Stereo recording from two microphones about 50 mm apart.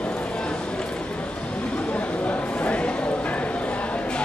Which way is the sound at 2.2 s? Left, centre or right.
Left.